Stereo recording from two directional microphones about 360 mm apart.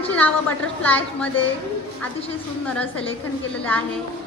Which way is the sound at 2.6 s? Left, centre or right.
Centre.